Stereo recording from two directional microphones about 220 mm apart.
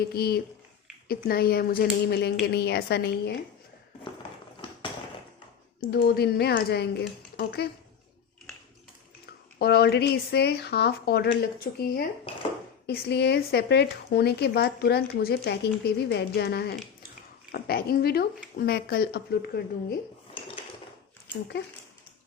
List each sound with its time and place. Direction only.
0.1 s speech: 45° left (ahead or behind)
5.8 s speech: 45° left (ahead or behind)
9.6 s speech: 45° left (ahead or behind)